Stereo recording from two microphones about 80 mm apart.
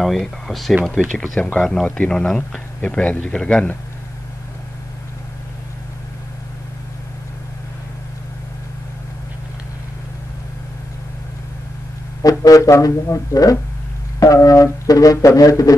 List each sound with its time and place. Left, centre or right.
0.0 s speech: centre
12.2 s music: left
12.8 s speech: left